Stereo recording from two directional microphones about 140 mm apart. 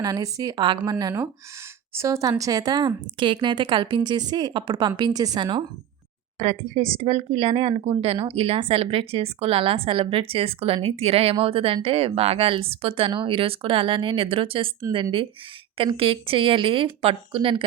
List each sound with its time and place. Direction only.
0.0 s a woman's voice: 25° right (ahead or behind)
6.4 s speech: 50° right (ahead or behind)
15.8 s speech: 40° right (ahead or behind)